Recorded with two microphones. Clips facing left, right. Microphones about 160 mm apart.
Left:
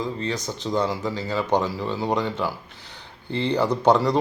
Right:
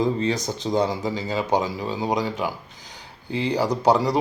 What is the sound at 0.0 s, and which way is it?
Speech, 10° right (ahead or behind).